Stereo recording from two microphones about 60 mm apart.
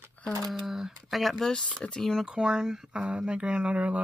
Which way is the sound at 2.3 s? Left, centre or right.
Centre.